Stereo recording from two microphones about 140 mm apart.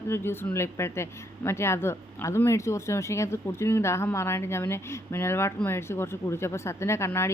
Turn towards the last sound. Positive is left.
turn(degrees=20)  # may be behind; listen again after turning